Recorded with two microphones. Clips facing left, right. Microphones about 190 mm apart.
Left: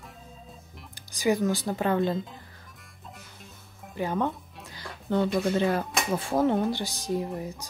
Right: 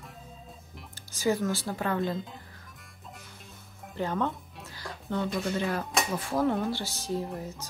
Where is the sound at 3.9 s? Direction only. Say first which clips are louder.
Left 2 dB; 15° left (ahead or behind).